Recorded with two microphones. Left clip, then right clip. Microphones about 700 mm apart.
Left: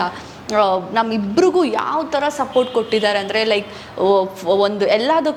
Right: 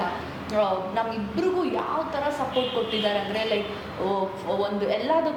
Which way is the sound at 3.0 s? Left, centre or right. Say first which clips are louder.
Left 8 dB; left.